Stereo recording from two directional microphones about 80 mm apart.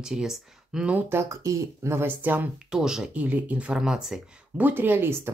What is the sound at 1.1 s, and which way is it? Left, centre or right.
Speech, right.